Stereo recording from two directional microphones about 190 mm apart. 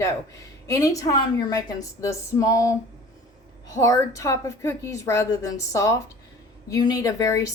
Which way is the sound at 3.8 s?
15° left (ahead or behind).